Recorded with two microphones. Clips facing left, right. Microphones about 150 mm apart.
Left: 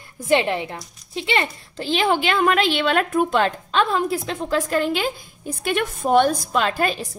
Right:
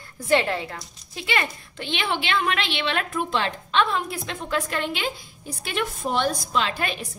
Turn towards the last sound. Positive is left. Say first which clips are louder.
# left 5 dB
turn(degrees=45)  # may be behind; listen again after turning